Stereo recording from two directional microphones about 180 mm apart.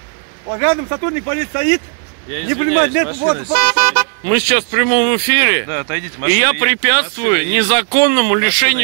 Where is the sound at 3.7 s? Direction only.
35° right (ahead or behind).